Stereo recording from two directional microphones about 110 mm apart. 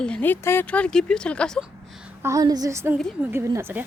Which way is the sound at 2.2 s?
35° right (ahead or behind).